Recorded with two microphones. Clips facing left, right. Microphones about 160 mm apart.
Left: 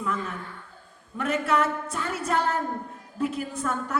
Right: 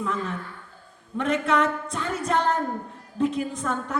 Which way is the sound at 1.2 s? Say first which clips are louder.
Right 2 dB; 10° left (ahead or behind).